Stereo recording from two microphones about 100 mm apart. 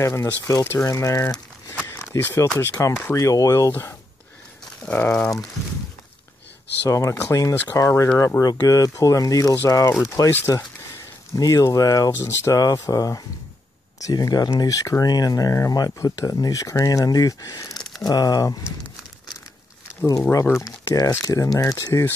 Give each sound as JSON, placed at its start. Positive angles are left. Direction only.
{"t": 0.0, "sound": "speech", "side_deg": 30}
{"t": 1.8, "sound": "a sound", "side_deg": 20}
{"t": 2.7, "sound": "speech", "side_deg": 30}
{"t": 4.8, "sound": "speech", "side_deg": 15}
{"t": 6.9, "sound": "speech", "side_deg": 30}
{"t": 20.1, "sound": "speech", "side_deg": 35}